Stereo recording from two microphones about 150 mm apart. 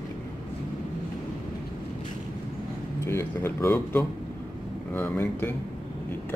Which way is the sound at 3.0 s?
15° left (ahead or behind).